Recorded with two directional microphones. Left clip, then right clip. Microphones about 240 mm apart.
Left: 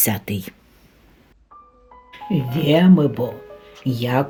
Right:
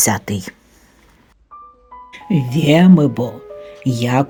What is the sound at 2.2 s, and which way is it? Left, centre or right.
Speech, right.